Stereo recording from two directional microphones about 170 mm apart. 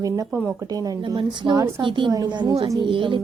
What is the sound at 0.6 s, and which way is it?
A woman's voice, 20° right (ahead or behind).